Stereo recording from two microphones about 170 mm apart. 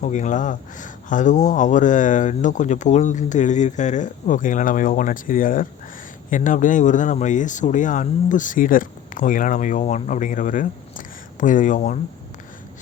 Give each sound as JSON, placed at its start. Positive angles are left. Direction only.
{"t": 0.0, "sound": "speech", "side_deg": 45}